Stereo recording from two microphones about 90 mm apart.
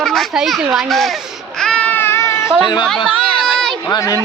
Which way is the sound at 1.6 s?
10° left (ahead or behind).